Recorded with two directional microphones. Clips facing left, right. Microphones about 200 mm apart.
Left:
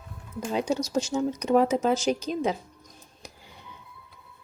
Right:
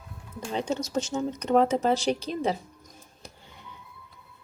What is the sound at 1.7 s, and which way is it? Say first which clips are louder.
Speech: left 1 dB; 35° right (ahead or behind).